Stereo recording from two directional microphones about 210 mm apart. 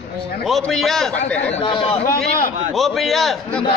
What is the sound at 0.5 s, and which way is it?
Speech, centre (ahead or behind).